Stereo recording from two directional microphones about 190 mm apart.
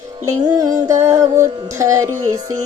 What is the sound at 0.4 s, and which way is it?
Music, 20° right (ahead or behind).